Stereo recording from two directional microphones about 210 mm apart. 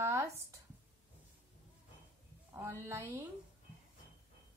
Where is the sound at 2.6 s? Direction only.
10° right (ahead or behind).